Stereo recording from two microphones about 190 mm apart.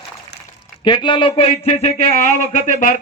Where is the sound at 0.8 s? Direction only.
25° left (ahead or behind).